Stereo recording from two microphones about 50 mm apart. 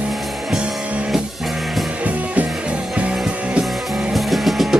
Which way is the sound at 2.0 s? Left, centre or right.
Right.